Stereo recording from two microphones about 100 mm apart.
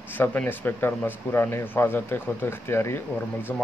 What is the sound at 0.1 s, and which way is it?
Speech, 20° left (ahead or behind).